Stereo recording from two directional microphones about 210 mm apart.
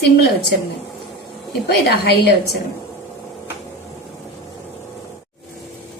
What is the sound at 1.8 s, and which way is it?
Speech, 50° left (ahead or behind).